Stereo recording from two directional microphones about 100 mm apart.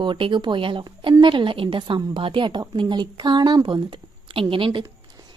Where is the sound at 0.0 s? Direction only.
55° right (ahead or behind).